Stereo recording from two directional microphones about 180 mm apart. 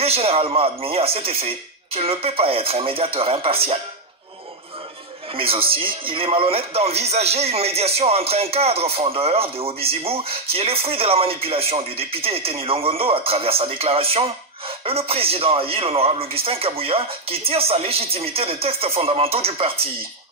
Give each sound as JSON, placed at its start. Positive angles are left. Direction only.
{"t": 0.0, "sound": "speech", "side_deg": -35}
{"t": 5.3, "sound": "speech", "side_deg": -30}